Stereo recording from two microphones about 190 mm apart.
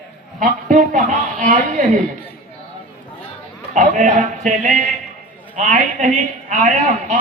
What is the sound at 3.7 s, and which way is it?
Speech, 40° right (ahead or behind).